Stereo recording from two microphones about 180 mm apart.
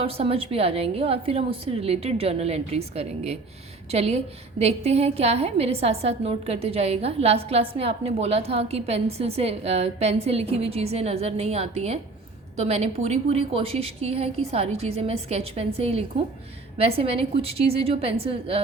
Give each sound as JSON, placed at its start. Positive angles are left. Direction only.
{"t": 0.0, "sound": "a woman's voice", "side_deg": -30}